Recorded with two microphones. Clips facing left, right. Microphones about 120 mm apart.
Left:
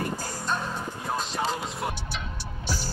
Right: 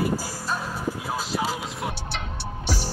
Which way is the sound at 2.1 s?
65° right (ahead or behind).